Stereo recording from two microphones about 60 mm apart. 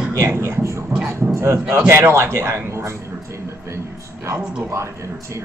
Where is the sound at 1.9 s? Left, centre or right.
Right.